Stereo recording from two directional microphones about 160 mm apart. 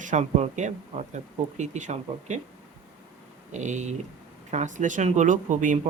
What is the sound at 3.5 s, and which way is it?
Speech, 50° right (ahead or behind).